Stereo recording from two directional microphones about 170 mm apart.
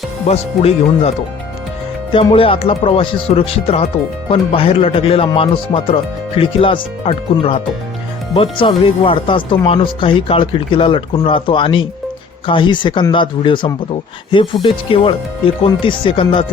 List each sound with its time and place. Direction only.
0.3 s speech: 35° left (ahead or behind)
2.1 s speech: 35° left (ahead or behind)